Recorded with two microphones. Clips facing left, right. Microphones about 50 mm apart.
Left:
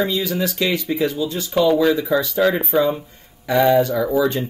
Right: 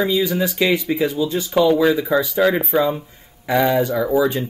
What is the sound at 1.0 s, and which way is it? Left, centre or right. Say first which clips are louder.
Speech: right 1 dB; centre.